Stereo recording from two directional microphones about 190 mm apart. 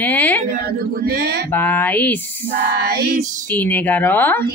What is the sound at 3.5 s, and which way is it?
Speech, 10° left (ahead or behind).